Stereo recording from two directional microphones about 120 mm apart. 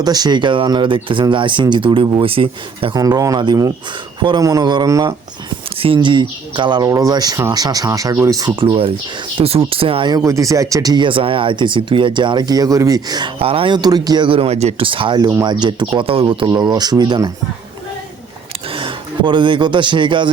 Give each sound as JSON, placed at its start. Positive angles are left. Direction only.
{"t": 0.0, "sound": "speech", "side_deg": -35}
{"t": 3.0, "sound": "speech", "side_deg": -30}
{"t": 5.7, "sound": "speech", "side_deg": -50}
{"t": 6.8, "sound": "speech", "side_deg": -30}
{"t": 8.5, "sound": "speech", "side_deg": -50}
{"t": 10.1, "sound": "speech", "side_deg": -30}
{"t": 13.4, "sound": "speech", "side_deg": -50}
{"t": 14.8, "sound": "speech", "side_deg": -45}
{"t": 15.2, "sound": "speech", "side_deg": -30}
{"t": 16.5, "sound": "speech", "side_deg": -35}
{"t": 18.7, "sound": "speech", "side_deg": -45}